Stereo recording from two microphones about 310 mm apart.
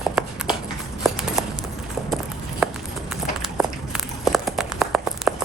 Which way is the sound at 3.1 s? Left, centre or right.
Centre.